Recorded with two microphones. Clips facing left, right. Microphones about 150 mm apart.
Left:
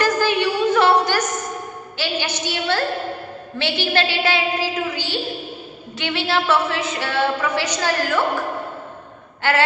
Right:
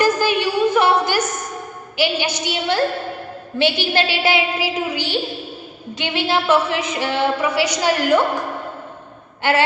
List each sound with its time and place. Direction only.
0.0 s a sound: 15° right (ahead or behind)
3.6 s a woman's voice: 15° right (ahead or behind)
9.4 s gasp: 15° right (ahead or behind)